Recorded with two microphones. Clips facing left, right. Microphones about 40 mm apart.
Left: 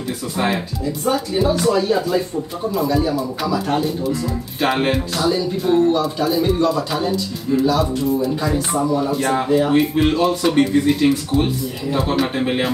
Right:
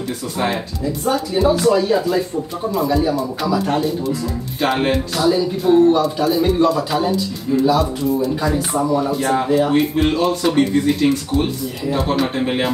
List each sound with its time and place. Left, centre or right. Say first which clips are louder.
1.3 s speech: right 3 dB; centre
8.7 s speech: right 1 dB; centre
9.1 s speech: even; centre